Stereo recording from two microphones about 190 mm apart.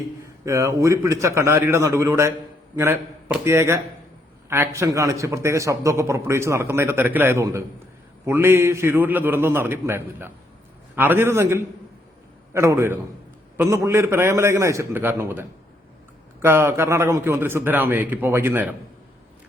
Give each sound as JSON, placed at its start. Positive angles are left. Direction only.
{"t": 0.4, "sound": "a man's voice", "side_deg": -15}